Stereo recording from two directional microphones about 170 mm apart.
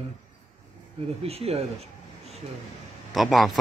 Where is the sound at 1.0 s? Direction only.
35° right (ahead or behind).